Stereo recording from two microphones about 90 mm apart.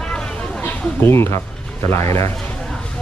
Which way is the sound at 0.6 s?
25° left (ahead or behind).